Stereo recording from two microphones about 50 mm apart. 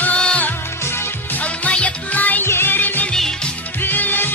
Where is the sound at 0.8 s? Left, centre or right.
Left.